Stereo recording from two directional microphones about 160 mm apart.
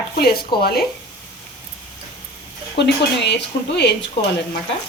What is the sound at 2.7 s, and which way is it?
Speech, 90° left.